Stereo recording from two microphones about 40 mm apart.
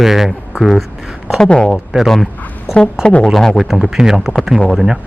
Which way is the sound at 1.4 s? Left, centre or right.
Left.